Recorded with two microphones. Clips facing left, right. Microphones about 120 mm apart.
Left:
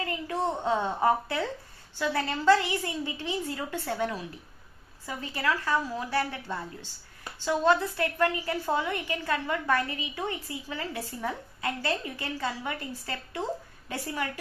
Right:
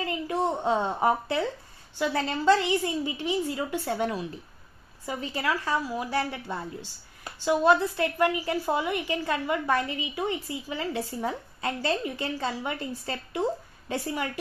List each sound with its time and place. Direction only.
0.0 s a woman's voice: 20° right (ahead or behind)